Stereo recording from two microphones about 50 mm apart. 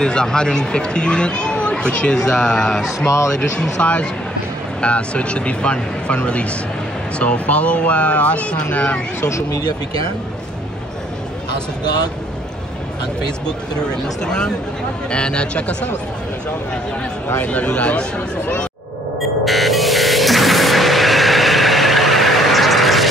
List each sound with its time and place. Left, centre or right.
0.0 s speech: centre
4.8 s speech: left
9.2 s speech: left
13.5 s speech: centre
17.4 s speech: left
19.4 s music: centre